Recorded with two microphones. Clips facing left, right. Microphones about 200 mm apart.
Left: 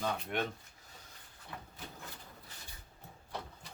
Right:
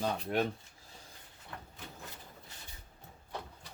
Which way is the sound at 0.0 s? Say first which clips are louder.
Right 4 dB; 35° right (ahead or behind).